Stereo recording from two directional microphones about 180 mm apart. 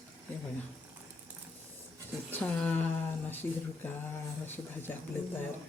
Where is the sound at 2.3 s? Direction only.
5° left (ahead or behind).